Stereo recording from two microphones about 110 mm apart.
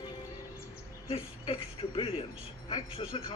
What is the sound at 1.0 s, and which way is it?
A man's voice, 55° left (ahead or behind).